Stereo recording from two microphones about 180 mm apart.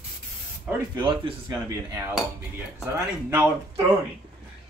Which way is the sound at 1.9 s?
10° right (ahead or behind).